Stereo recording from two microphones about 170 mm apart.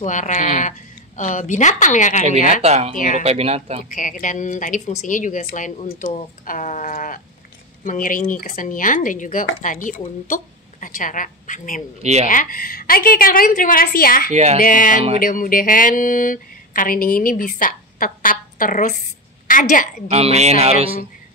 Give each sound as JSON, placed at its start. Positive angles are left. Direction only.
{"t": 0.0, "sound": "speech", "side_deg": 45}
{"t": 2.6, "sound": "speech", "side_deg": -40}
{"t": 3.9, "sound": "speech", "side_deg": 50}
{"t": 12.0, "sound": "speech", "side_deg": -40}
{"t": 12.3, "sound": "a woman's voice", "side_deg": 55}
{"t": 14.3, "sound": "speech", "side_deg": -40}
{"t": 14.6, "sound": "a woman's voice", "side_deg": 55}
{"t": 20.1, "sound": "speech", "side_deg": -35}